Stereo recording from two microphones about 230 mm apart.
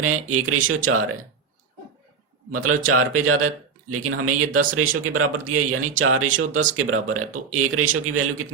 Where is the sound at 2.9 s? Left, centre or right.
Right.